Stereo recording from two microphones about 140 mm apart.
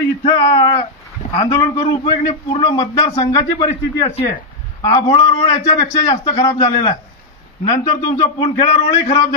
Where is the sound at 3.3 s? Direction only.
35° left (ahead or behind).